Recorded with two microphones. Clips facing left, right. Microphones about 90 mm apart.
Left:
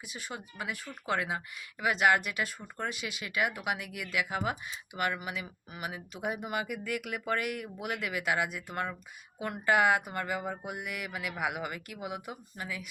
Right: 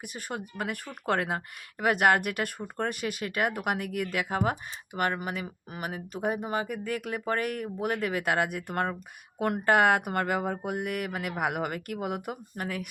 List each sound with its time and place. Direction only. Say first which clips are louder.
0.0 s speech: right 5 dB; 55° right (ahead or behind)